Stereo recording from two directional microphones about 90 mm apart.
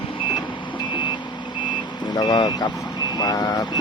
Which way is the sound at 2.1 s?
50° left (ahead or behind).